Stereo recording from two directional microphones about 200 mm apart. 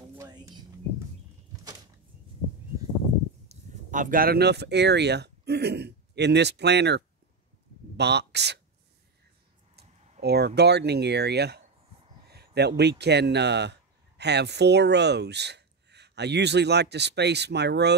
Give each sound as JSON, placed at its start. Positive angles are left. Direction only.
{"t": 0.1, "sound": "a sound", "side_deg": -15}
{"t": 3.4, "sound": "speech", "side_deg": -40}
{"t": 8.0, "sound": "speech", "side_deg": -60}
{"t": 9.8, "sound": "speech", "side_deg": -55}